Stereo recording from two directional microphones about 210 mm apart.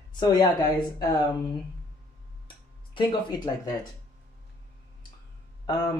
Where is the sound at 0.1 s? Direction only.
20° left (ahead or behind).